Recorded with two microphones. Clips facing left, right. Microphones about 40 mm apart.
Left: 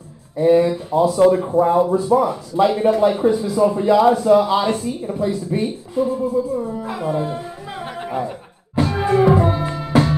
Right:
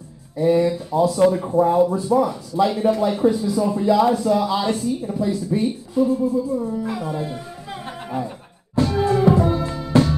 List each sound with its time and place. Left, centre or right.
0.4 s speech: left
8.7 s music: left